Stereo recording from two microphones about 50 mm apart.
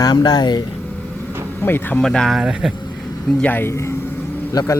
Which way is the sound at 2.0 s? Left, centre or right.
Centre.